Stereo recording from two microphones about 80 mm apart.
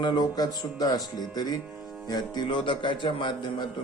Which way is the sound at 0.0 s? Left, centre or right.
Left.